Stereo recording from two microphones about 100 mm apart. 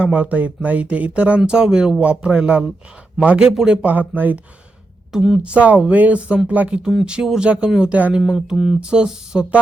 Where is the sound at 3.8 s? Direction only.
15° right (ahead or behind).